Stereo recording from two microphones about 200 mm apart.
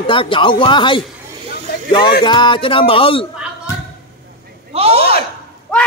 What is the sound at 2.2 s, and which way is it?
Speech, 25° left (ahead or behind).